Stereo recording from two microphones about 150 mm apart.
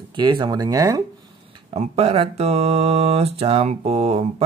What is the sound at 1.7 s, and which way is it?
Mantra, 40° right (ahead or behind).